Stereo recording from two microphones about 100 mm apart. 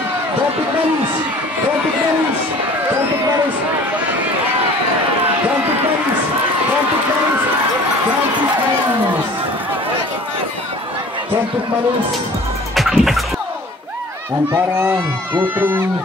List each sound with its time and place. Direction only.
12.7 s music: centre (ahead or behind)
14.5 s speech: 20° right (ahead or behind)